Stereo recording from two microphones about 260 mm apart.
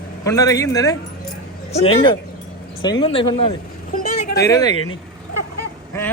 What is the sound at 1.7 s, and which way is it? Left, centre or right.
Speech, left.